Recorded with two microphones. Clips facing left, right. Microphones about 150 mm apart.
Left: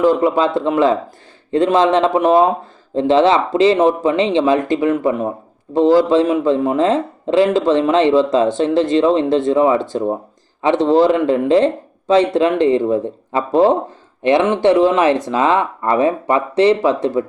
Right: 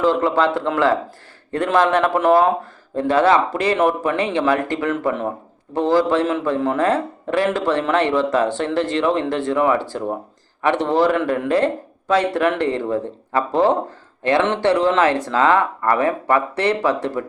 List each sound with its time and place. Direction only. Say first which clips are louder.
0.0 s a man's voice: left 3 dB; 15° left (ahead or behind)